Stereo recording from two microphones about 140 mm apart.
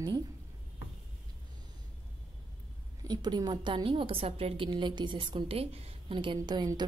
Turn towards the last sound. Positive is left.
turn(degrees=-30)  # may be behind; listen again after turning